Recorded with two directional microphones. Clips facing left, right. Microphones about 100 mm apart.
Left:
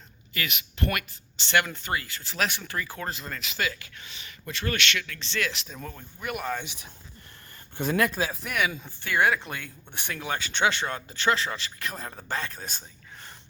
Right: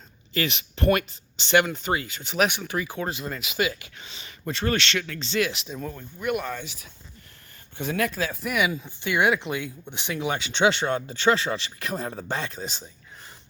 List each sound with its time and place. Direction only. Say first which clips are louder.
0.3 s speech: right 5 dB; 30° right (ahead or behind)
5.5 s speech: right 4 dB; 5° right (ahead or behind)
6.4 s speech: left 1 dB; 20° left (ahead or behind)
7.8 s speech: left 1 dB; 40° left (ahead or behind)
8.3 s speech: right 5 dB; centre (ahead or behind)
8.5 s speech: right 3 dB; 15° right (ahead or behind); by 12.5 s 30° right (ahead or behind)